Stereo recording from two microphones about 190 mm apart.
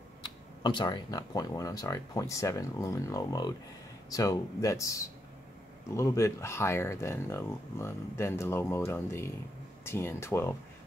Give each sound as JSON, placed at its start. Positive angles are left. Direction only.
{"t": 0.2, "sound": "speech", "side_deg": 25}